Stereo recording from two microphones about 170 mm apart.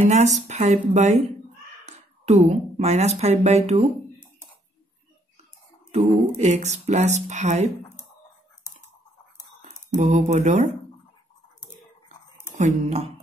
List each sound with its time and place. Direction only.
0.0 s speech: 45° right (ahead or behind)
2.2 s a woman's voice: 40° right (ahead or behind)
5.9 s speech: 40° right (ahead or behind)
9.9 s a woman's voice: 45° right (ahead or behind)
12.5 s a woman's voice: 45° right (ahead or behind)